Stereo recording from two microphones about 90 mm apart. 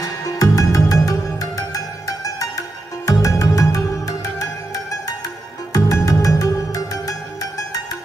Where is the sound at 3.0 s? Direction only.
40° left (ahead or behind).